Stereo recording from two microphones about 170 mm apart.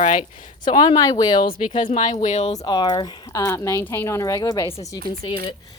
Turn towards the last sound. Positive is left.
turn(degrees=30)  # may be behind; listen again after turning